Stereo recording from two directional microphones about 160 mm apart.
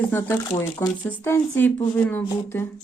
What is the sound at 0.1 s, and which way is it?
Speech, 15° left (ahead or behind).